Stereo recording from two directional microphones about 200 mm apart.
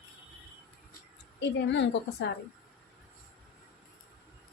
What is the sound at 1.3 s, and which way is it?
Speech, 60° left (ahead or behind).